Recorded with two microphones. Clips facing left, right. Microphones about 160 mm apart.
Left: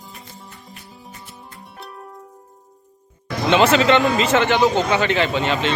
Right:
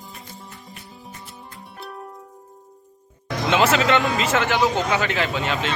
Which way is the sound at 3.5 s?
5° right (ahead or behind).